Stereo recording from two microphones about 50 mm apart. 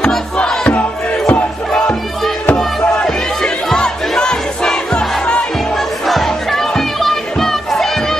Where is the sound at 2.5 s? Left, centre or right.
Centre.